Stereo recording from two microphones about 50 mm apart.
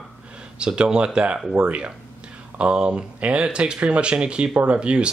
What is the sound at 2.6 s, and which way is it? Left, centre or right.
Speech, right.